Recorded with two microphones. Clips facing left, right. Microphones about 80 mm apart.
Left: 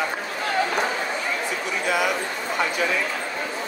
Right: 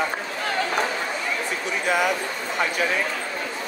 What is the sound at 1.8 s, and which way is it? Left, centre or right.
Speech, right.